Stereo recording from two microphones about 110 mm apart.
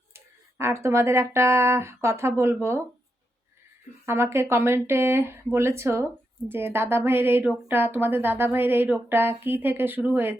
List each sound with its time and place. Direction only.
0.6 s a woman's voice: 25° right (ahead or behind)
4.0 s a woman's voice: 25° right (ahead or behind)